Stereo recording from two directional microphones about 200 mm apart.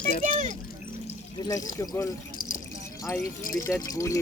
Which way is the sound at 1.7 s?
15° left (ahead or behind).